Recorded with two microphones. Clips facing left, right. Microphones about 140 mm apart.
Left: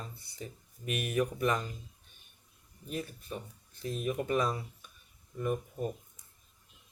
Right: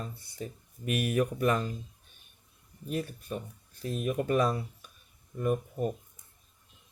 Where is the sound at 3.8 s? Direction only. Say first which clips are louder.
Right 3 dB; 45° right (ahead or behind).